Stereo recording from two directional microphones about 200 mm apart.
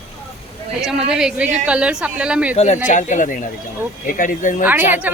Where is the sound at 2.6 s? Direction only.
35° left (ahead or behind).